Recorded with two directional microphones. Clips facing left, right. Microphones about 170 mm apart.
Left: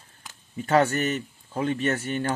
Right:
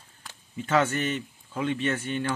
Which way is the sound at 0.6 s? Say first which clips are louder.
Left 3 dB; 45° left (ahead or behind).